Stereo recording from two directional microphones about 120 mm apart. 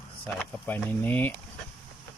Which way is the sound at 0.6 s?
15° left (ahead or behind).